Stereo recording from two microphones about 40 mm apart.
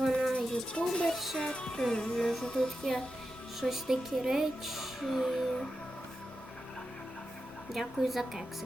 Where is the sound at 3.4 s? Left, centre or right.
Centre.